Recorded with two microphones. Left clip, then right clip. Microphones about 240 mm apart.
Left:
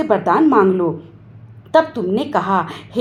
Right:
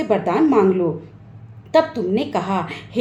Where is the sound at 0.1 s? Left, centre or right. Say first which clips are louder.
Left 3 dB; centre.